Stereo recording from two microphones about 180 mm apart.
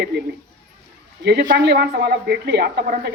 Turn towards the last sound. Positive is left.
turn(degrees=-65)  # may be behind; listen again after turning